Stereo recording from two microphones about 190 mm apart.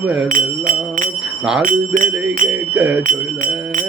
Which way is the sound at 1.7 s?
45° right (ahead or behind).